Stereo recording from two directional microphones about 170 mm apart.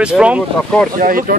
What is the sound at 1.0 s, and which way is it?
Speech, 55° right (ahead or behind).